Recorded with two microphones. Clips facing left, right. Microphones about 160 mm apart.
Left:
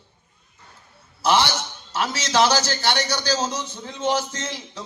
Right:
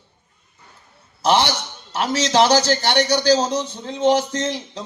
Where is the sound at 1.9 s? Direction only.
15° right (ahead or behind).